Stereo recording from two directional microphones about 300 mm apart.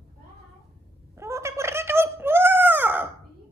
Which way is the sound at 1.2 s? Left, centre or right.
Centre.